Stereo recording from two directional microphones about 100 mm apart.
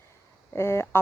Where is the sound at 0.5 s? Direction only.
25° left (ahead or behind).